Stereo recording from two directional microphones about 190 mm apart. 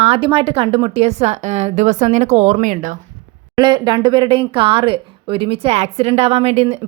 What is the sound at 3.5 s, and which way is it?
Speech, 25° right (ahead or behind).